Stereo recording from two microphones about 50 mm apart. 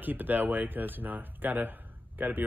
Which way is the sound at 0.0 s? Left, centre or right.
Right.